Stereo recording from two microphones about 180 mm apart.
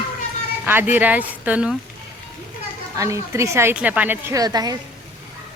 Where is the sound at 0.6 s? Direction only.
10° right (ahead or behind).